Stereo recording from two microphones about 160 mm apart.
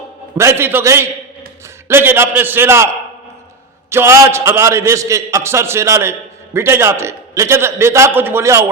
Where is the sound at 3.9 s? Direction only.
15° right (ahead or behind).